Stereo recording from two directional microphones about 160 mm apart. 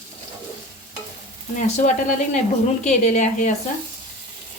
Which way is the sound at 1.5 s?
50° left (ahead or behind).